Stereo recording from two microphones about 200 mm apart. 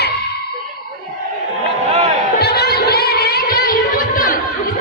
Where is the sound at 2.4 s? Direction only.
55° left (ahead or behind).